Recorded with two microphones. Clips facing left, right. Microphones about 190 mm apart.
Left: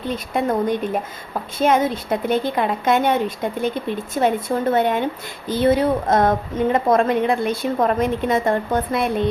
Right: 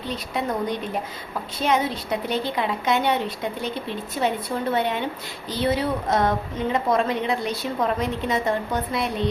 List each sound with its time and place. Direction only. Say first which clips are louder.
0.1 s a woman's voice: left 5 dB; 50° left (ahead or behind)